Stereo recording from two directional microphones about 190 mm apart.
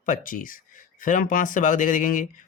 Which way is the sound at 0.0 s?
45° left (ahead or behind).